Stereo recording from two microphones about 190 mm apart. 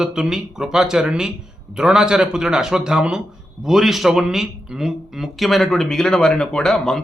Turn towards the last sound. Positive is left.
turn(degrees=5)  # may be behind; listen again after turning